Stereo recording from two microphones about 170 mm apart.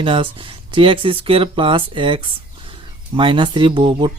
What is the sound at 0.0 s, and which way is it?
Speech, 30° right (ahead or behind).